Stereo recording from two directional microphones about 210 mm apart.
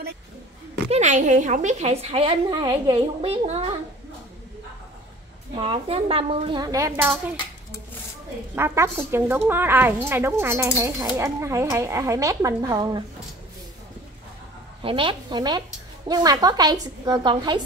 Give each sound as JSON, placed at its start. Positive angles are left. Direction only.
{"t": 0.9, "sound": "a woman's voice", "side_deg": -35}
{"t": 5.5, "sound": "a woman's voice", "side_deg": -25}
{"t": 8.5, "sound": "speech", "side_deg": -10}
{"t": 14.8, "sound": "a woman's voice", "side_deg": -25}